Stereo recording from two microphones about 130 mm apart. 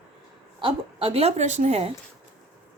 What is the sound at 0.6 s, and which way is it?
A woman's voice, 45° right (ahead or behind).